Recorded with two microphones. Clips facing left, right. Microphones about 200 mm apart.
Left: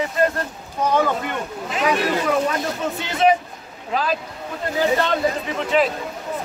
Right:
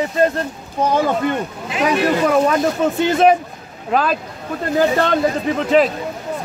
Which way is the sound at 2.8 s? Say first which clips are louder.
Right 7 dB; 50° right (ahead or behind).